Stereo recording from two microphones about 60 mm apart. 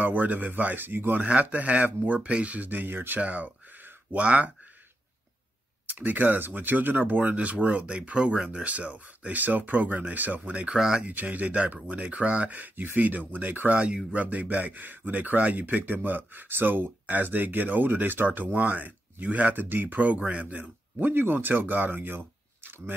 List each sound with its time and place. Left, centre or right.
0.0 s speech: right
1.2 s speech: right
5.9 s speech: right
10.8 s speech: centre
11.1 s speech: right
13.7 s speech: centre
21.1 s speech: right